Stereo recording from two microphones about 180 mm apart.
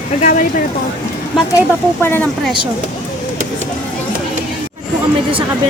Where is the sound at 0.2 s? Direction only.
50° left (ahead or behind).